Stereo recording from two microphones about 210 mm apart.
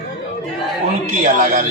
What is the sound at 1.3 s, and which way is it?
Speech, 40° right (ahead or behind).